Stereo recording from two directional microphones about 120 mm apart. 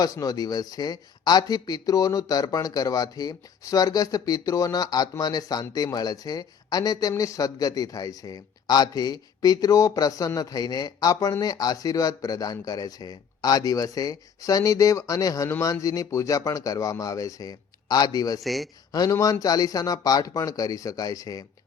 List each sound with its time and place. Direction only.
0.0 s a man's voice: 30° left (ahead or behind)
18.3 s speech: centre (ahead or behind)
18.9 s a man's voice: 30° left (ahead or behind)